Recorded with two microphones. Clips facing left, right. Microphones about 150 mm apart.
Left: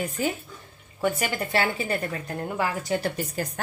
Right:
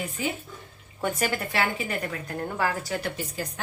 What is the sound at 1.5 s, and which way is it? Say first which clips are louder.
A woman's voice: left 2 dB; 30° left (ahead or behind).